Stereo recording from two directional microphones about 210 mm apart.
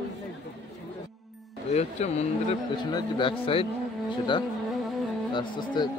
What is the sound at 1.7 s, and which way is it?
Speech, 30° left (ahead or behind).